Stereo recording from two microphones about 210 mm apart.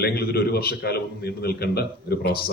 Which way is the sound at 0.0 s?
50° left (ahead or behind).